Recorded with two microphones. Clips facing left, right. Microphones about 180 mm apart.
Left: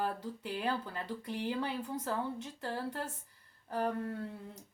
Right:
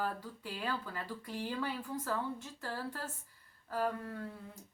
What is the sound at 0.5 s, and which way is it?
Speech, 20° left (ahead or behind).